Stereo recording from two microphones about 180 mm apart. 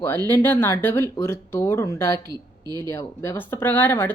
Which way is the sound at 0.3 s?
10° left (ahead or behind).